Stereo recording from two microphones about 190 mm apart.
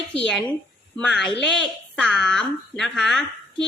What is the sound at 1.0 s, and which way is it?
Speech, 5° left (ahead or behind).